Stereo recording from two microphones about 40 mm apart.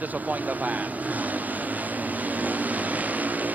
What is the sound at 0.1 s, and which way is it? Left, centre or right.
Vehicle, right.